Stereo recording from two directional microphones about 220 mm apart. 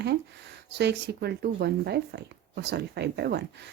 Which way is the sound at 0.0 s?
50° right (ahead or behind).